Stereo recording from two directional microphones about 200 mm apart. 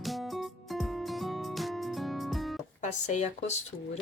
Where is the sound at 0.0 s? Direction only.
Centre (ahead or behind).